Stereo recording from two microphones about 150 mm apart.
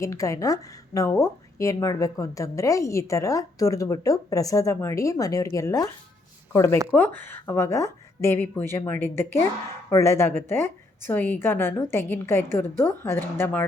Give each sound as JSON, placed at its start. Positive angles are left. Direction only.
{"t": 0.0, "sound": "a woman's voice", "side_deg": 20}